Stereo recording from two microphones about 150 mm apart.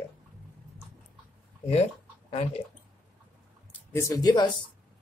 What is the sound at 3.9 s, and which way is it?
Speech, 20° left (ahead or behind).